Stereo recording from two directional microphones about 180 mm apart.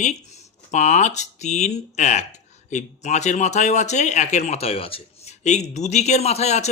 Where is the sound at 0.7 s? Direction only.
40° left (ahead or behind).